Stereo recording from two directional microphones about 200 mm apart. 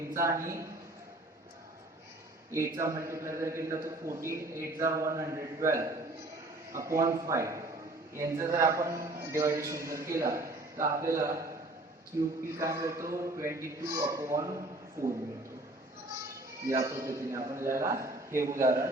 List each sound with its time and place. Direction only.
0.1 s a man's voice: 15° right (ahead or behind)
2.5 s a man's voice: 15° right (ahead or behind)
12.5 s a man's voice: 15° right (ahead or behind)
16.8 s a man's voice: 15° right (ahead or behind)